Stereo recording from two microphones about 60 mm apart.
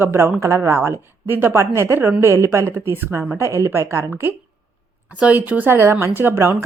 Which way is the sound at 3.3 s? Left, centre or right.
Right.